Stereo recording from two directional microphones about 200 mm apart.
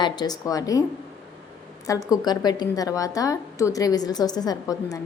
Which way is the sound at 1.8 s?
15° left (ahead or behind).